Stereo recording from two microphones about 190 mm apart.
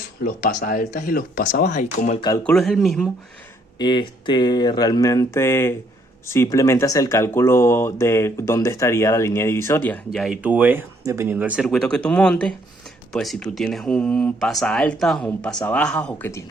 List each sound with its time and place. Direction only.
0.4 s speech: 45° left (ahead or behind)
2.4 s speech: 5° left (ahead or behind)
3.8 s speech: 25° left (ahead or behind)
10.1 s speech: centre (ahead or behind)